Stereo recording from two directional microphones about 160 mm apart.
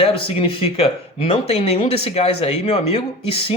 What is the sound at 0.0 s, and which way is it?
Speech, 35° left (ahead or behind).